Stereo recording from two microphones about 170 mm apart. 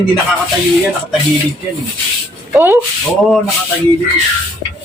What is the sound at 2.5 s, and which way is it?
Speech, 10° right (ahead or behind).